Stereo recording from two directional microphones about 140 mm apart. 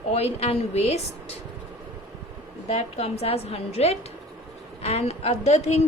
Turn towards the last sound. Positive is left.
turn(degrees=50)  # may be behind; listen again after turning